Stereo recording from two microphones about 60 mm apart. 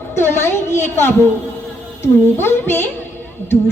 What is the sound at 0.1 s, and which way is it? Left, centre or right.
A woman's voice, left.